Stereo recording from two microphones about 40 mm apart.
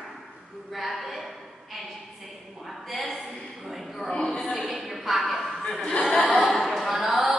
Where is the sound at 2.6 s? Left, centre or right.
Centre.